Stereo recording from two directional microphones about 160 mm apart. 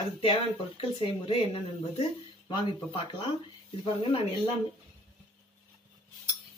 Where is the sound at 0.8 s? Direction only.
35° left (ahead or behind).